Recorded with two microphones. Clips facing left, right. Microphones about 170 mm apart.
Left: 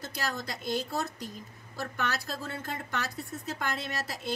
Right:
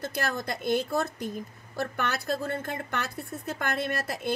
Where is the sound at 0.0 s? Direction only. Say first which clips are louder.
Right 4 dB; 55° right (ahead or behind).